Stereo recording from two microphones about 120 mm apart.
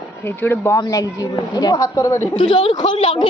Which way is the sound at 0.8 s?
30° left (ahead or behind).